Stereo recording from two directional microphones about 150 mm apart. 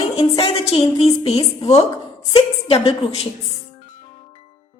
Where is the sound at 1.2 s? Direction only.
40° left (ahead or behind).